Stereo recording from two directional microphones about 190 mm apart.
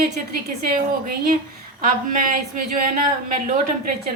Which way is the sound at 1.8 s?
45° right (ahead or behind).